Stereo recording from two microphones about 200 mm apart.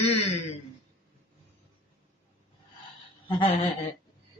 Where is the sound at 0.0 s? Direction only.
30° left (ahead or behind).